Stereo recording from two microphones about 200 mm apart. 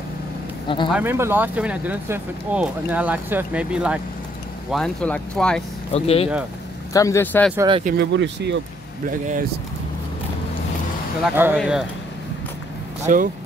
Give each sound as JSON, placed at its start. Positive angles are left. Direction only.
{"t": 0.8, "sound": "speech", "side_deg": -10}
{"t": 5.9, "sound": "speech", "side_deg": 30}
{"t": 6.9, "sound": "speech", "side_deg": 15}
{"t": 7.5, "sound": "speech", "side_deg": -20}
{"t": 8.0, "sound": "speech", "side_deg": -60}
{"t": 9.2, "sound": "speech", "side_deg": -40}
{"t": 11.2, "sound": "speech", "side_deg": -10}
{"t": 13.0, "sound": "speech", "side_deg": -40}